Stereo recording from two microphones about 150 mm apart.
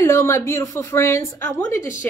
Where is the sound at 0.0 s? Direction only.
15° left (ahead or behind).